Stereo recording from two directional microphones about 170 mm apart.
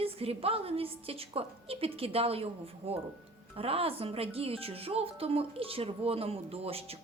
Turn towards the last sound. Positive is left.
turn(degrees=-35)  # may be behind; listen again after turning